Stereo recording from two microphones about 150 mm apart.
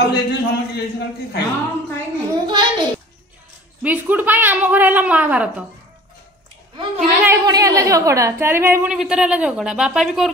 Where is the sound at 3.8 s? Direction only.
10° right (ahead or behind).